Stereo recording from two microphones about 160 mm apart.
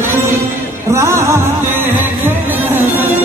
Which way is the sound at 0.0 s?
15° right (ahead or behind).